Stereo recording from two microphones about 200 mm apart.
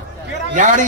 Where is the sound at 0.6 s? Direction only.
40° right (ahead or behind).